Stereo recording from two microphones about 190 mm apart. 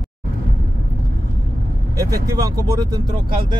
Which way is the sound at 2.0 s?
20° right (ahead or behind).